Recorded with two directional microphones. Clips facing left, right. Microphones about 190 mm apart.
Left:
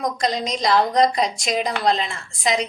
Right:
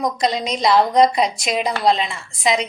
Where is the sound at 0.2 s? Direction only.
5° right (ahead or behind).